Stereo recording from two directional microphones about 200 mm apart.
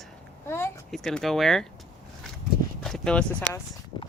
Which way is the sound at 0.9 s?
Centre (ahead or behind).